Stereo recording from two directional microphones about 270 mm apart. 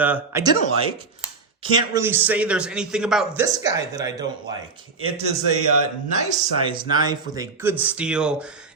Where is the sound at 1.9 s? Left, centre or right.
Centre.